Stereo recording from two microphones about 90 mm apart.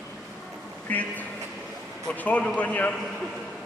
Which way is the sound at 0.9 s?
20° left (ahead or behind).